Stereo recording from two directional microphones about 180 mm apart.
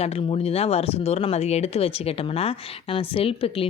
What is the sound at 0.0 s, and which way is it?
Speech, 35° left (ahead or behind).